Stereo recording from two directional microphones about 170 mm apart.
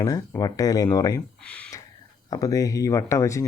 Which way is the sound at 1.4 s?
5° left (ahead or behind).